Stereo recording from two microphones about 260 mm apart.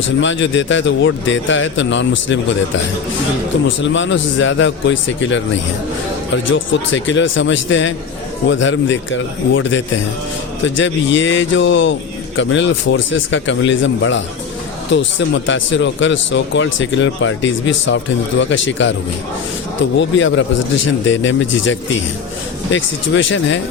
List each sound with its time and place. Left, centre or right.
0.2 s speech: left
3.8 s speech: left
20.0 s speech: left